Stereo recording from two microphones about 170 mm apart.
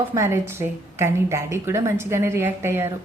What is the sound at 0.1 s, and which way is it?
A woman's voice, 15° right (ahead or behind).